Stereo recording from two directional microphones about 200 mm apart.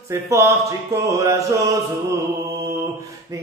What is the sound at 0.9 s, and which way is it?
Music, 15° right (ahead or behind).